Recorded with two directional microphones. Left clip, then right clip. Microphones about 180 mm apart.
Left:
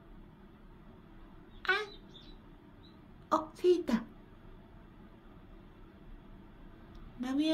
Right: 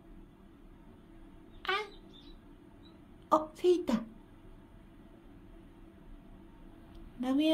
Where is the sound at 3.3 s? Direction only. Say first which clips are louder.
Right 1 dB; 20° right (ahead or behind).